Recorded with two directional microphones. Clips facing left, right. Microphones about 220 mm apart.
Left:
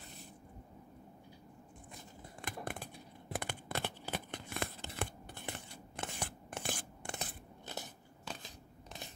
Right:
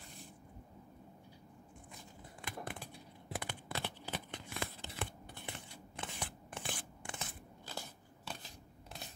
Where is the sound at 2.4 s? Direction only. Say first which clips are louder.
Left 2 dB; 50° left (ahead or behind).